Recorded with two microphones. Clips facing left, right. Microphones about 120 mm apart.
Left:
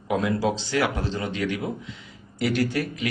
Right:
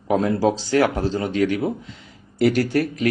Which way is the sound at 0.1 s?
35° right (ahead or behind).